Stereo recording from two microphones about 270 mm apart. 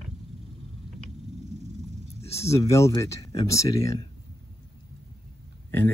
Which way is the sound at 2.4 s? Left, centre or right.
Centre.